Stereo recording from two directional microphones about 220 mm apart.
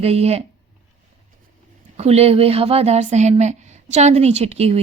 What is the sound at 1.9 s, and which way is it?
A woman's voice, 30° right (ahead or behind).